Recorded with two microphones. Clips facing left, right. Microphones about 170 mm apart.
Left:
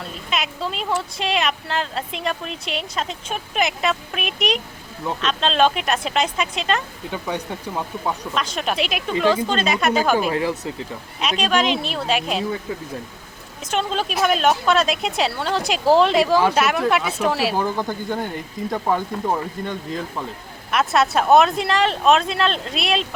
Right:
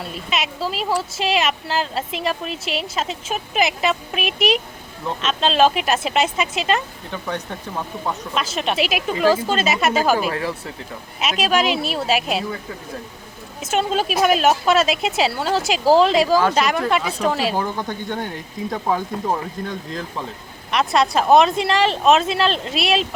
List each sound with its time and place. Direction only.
0.3 s speech: centre (ahead or behind)
7.1 s speech: 10° left (ahead or behind)
8.4 s speech: 5° right (ahead or behind)
10.3 s speech: 20° left (ahead or behind)
11.2 s speech: 5° right (ahead or behind)
13.6 s speech: 5° right (ahead or behind)